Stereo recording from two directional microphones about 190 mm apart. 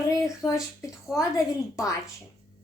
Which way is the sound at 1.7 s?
15° left (ahead or behind).